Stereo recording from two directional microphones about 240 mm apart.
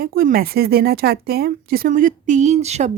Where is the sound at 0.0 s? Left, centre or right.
Right.